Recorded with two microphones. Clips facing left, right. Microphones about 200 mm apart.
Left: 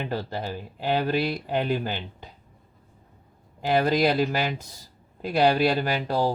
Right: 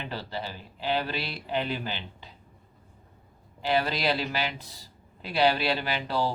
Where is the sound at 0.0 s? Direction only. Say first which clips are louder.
Left 5 dB; 50° left (ahead or behind).